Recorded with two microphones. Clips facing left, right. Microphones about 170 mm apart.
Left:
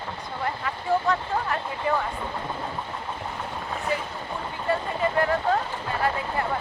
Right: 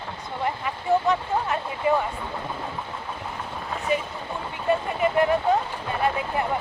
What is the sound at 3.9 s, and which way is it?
Speech, 20° right (ahead or behind).